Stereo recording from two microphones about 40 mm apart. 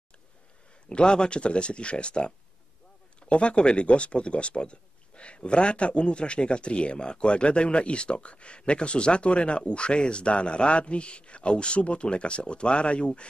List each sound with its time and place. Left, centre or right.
0.8 s speech: left